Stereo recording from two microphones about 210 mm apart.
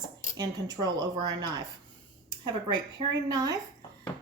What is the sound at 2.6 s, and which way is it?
Speech, 25° right (ahead or behind).